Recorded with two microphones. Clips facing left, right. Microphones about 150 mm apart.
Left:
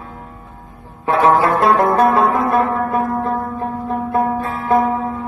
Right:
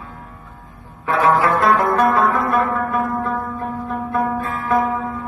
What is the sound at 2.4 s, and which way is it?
Music, 25° left (ahead or behind).